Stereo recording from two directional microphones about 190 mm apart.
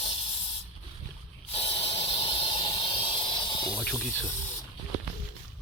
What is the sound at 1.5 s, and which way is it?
Hiss, 30° left (ahead or behind).